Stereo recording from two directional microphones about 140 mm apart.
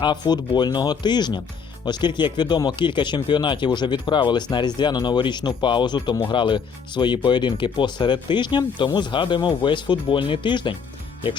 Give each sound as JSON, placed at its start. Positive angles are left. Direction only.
{"t": 0.0, "sound": "speech", "side_deg": 30}